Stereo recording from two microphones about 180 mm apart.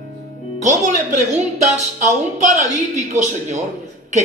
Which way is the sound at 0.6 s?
45° right (ahead or behind).